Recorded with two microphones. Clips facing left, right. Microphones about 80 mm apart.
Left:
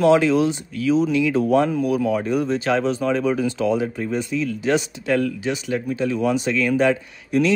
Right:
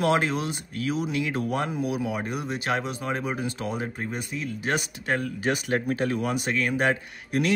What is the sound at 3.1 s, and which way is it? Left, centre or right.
Speech, right.